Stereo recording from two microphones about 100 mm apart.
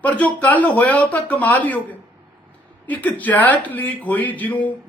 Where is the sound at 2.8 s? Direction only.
15° left (ahead or behind).